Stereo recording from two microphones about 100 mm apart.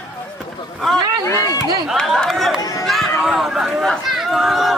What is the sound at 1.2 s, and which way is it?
Speech, 35° left (ahead or behind).